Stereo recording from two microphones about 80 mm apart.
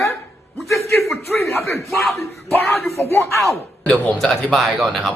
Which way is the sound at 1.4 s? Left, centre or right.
Left.